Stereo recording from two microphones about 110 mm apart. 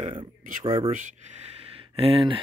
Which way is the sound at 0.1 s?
50° right (ahead or behind).